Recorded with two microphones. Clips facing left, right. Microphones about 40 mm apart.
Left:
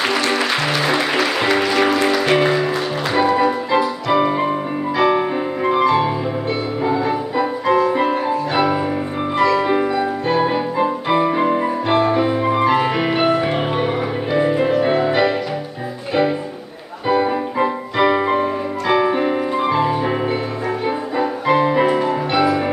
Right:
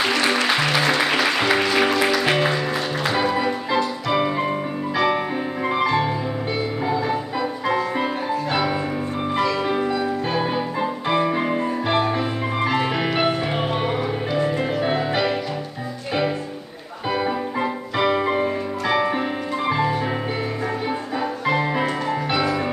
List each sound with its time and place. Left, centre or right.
0.2 s music: centre
7.6 s music: centre
9.4 s music: centre
9.7 s music: centre
14.3 s music: centre
14.7 s music: centre
17.1 s music: centre
21.2 s music: centre